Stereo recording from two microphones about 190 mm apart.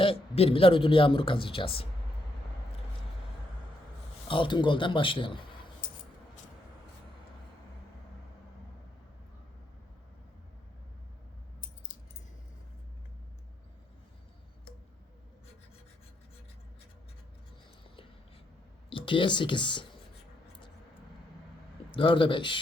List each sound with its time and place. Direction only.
0.0 s speech: 30° left (ahead or behind)
4.3 s speech: 25° left (ahead or behind)
18.9 s speech: 25° left (ahead or behind)
21.9 s speech: 25° left (ahead or behind)